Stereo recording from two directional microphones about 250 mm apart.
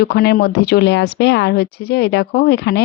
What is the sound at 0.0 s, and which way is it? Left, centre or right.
A woman's voice, left.